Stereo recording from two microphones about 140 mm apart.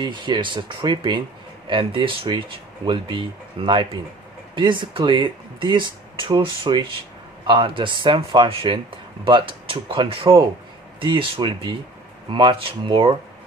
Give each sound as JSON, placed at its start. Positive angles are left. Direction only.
{"t": 0.0, "sound": "speech", "side_deg": -35}